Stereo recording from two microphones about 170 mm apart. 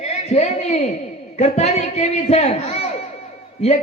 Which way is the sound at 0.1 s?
40° left (ahead or behind).